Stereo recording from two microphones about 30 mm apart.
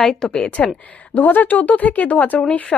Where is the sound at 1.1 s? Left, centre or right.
Left.